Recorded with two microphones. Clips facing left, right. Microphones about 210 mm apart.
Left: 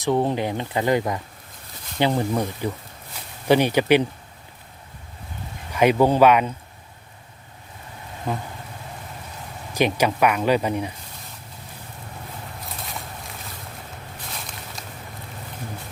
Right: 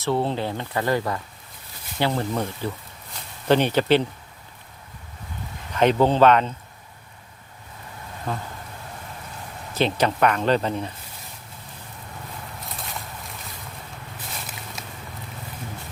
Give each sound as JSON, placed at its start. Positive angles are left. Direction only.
{"t": 0.0, "sound": "speech", "side_deg": 15}
{"t": 5.7, "sound": "speech", "side_deg": 10}
{"t": 8.3, "sound": "speech", "side_deg": 15}
{"t": 9.7, "sound": "speech", "side_deg": 10}
{"t": 12.6, "sound": "boat", "side_deg": 0}
{"t": 14.8, "sound": "walk", "side_deg": -5}